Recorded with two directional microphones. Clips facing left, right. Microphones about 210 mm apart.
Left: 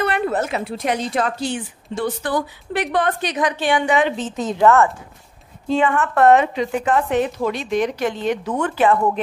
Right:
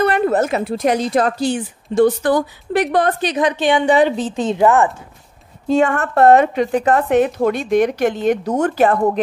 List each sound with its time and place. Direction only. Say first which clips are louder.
0.0 s a woman's voice: right 5 dB; 40° right (ahead or behind); by 3.8 s 20° right (ahead or behind)
3.8 s a woman's voice: right 5 dB; 35° right (ahead or behind)
4.6 s speech: even; 15° right (ahead or behind)
5.7 s a woman's voice: right 3 dB; 45° right (ahead or behind)
6.4 s a woman's voice: right 5 dB; 55° right (ahead or behind)